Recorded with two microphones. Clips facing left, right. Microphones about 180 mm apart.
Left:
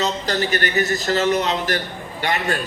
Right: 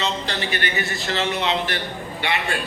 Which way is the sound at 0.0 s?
40° left (ahead or behind).